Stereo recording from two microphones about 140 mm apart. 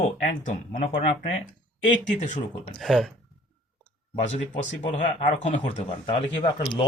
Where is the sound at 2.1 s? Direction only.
60° left (ahead or behind).